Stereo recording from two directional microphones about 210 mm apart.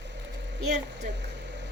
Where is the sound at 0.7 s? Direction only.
55° right (ahead or behind).